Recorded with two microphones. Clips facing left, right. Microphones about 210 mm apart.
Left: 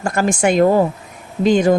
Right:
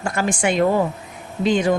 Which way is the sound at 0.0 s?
45° left (ahead or behind).